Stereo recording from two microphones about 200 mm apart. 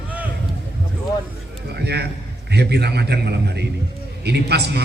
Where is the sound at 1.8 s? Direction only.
55° right (ahead or behind).